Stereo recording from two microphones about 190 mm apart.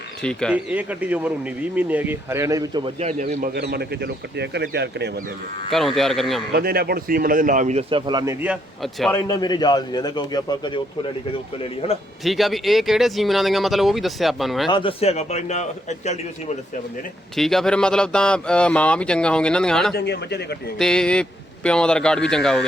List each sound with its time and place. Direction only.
0.2 s speech: 5° left (ahead or behind)
0.5 s speech: 10° right (ahead or behind)
3.0 s speech: 40° right (ahead or behind); by 5.2 s 60° right (ahead or behind)
5.7 s speech: centre (ahead or behind)
6.5 s a man's voice: 55° right (ahead or behind); by 9.1 s centre (ahead or behind)
9.1 s a man's voice: 20° left (ahead or behind)
12.2 s speech: centre (ahead or behind)
14.7 s a man's voice: 25° left (ahead or behind)
17.3 s speech: centre (ahead or behind)
19.9 s a man's voice: 60° left (ahead or behind)
20.7 s speech: 5° left (ahead or behind)